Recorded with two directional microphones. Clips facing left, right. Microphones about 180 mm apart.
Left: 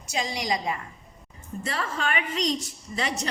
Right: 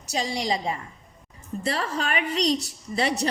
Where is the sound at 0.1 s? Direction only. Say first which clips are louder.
Right 2 dB; 30° right (ahead or behind).